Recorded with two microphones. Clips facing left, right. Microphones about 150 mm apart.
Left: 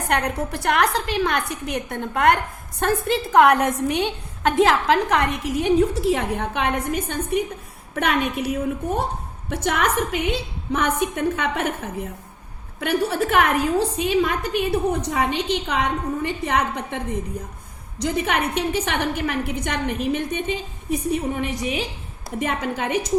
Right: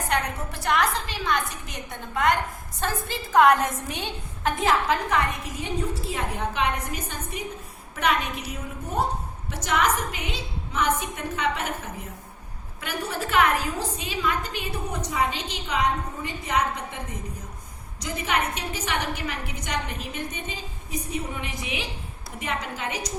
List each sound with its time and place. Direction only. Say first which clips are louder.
0.1 s a woman's voice: left 6 dB; 65° left (ahead or behind); by 21.8 s 40° left (ahead or behind)
22.4 s a woman's voice: left 7 dB; 50° left (ahead or behind)